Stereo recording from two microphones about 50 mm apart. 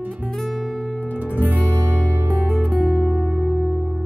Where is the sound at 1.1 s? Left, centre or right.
Right.